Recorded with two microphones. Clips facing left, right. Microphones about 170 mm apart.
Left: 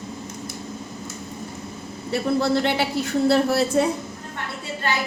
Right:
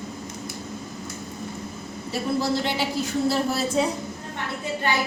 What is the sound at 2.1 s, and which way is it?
A man's voice, 60° left (ahead or behind).